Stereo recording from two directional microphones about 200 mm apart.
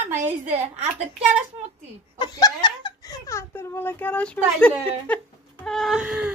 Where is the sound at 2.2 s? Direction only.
20° left (ahead or behind).